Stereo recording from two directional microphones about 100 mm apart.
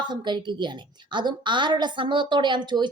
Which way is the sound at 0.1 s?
50° right (ahead or behind).